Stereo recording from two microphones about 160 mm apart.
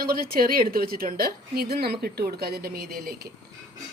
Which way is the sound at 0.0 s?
65° right (ahead or behind).